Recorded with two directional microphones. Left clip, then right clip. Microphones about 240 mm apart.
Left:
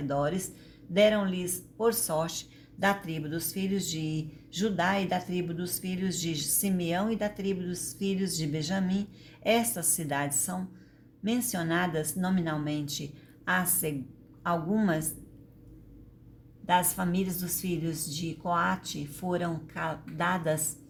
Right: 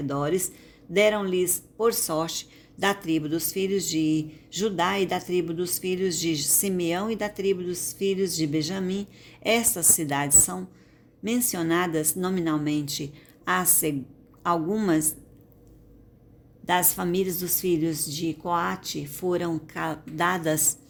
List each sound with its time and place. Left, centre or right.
0.1 s speech: right
16.6 s speech: right